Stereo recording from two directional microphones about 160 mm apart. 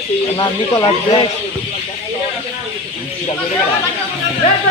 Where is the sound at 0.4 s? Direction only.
25° left (ahead or behind).